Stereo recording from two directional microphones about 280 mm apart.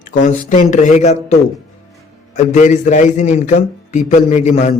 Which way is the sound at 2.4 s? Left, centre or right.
Left.